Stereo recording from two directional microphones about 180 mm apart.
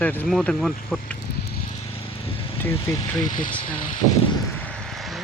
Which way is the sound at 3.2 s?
45° left (ahead or behind).